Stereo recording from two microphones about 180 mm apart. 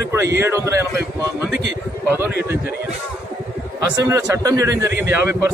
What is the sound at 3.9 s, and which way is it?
A man's voice, 20° right (ahead or behind).